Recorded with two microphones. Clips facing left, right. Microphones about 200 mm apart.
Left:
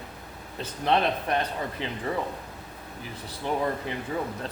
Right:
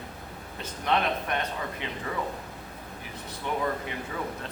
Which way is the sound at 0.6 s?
30° left (ahead or behind).